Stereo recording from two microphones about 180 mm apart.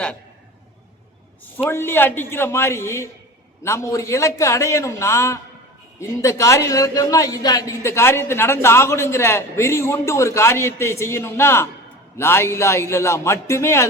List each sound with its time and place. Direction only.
1.7 s a man's voice: 10° left (ahead or behind)